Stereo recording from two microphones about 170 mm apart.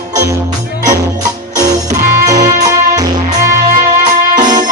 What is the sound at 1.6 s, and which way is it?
Music, 20° right (ahead or behind).